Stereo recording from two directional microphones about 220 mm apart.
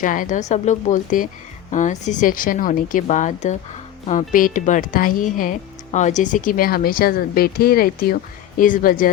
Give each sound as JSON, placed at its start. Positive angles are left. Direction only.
{"t": 0.0, "sound": "speech", "side_deg": 35}